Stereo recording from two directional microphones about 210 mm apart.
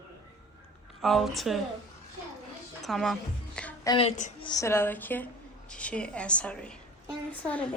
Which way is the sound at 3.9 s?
30° left (ahead or behind).